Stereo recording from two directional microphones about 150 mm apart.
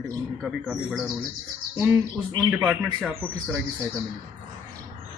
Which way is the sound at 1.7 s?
15° right (ahead or behind).